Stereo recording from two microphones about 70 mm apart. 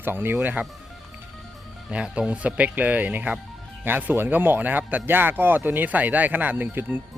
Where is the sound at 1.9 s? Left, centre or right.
Centre.